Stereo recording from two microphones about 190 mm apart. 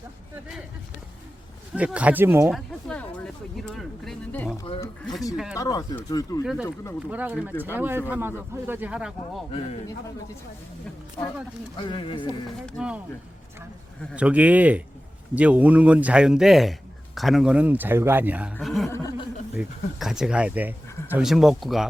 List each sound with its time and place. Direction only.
1.7 s speech: 5° right (ahead or behind)
2.5 s a sound: centre (ahead or behind)
5.5 s speech: 20° left (ahead or behind)
6.4 s speech: 5° right (ahead or behind)
11.8 s speech: 25° left (ahead or behind)
12.6 s speech: 5° right (ahead or behind)
14.2 s speech: 5° right (ahead or behind)
18.6 s a sound: centre (ahead or behind)
18.9 s chuckle: 15° left (ahead or behind)
19.5 s speech: centre (ahead or behind)